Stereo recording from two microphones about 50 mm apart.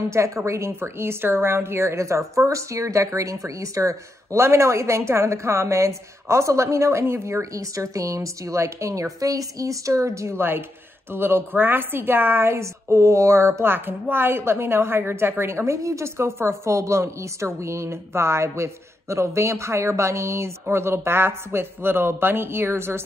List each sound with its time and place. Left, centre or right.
0.1 s speech: right
7.5 s a woman's voice: right
11.1 s a woman's voice: right
12.4 s speech: right
13.7 s speech: right
20.7 s speech: right